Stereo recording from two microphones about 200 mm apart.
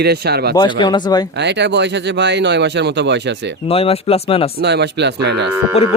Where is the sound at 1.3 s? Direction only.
60° right (ahead or behind).